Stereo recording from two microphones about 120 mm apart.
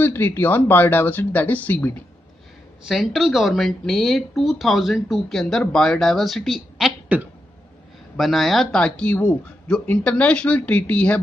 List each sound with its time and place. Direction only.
0.0 s speech: 20° left (ahead or behind)
2.9 s speech: centre (ahead or behind)
7.1 s speech: 10° right (ahead or behind)
8.2 s speech: centre (ahead or behind)